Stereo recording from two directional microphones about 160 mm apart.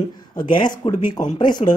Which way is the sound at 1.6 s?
40° left (ahead or behind).